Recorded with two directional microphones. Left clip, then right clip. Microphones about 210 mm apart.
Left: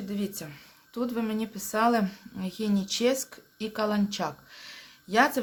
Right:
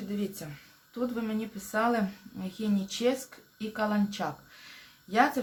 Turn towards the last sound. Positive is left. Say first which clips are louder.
# left 2 dB
turn(degrees=45)  # may be behind; listen again after turning